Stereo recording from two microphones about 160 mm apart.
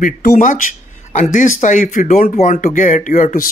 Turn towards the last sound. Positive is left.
turn(degrees=55)  # may be behind; listen again after turning